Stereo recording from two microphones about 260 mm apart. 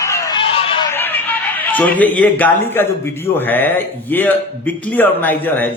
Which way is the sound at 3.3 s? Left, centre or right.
Centre.